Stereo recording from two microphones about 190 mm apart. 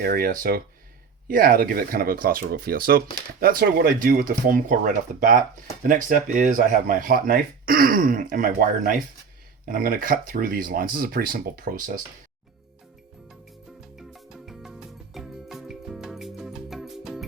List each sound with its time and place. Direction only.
0.0 s speech: 50° right (ahead or behind)
14.1 s music: centre (ahead or behind)